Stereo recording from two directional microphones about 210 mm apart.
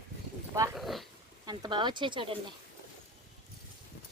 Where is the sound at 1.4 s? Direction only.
20° right (ahead or behind).